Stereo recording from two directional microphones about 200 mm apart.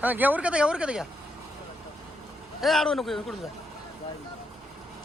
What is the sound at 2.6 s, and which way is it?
Speech, centre (ahead or behind).